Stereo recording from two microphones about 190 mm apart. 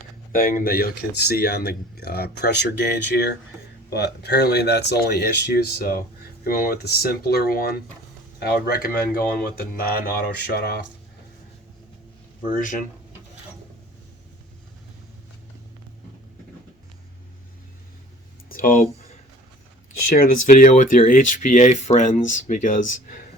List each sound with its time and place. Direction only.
0.3 s speech: 50° left (ahead or behind)
12.5 s speech: 45° left (ahead or behind)
18.4 s a sound: 50° left (ahead or behind)
20.1 s speech: 45° left (ahead or behind)